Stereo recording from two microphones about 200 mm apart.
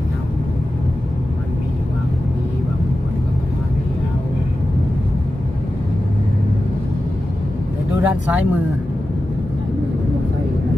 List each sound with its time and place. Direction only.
8.0 s speech: 5° right (ahead or behind)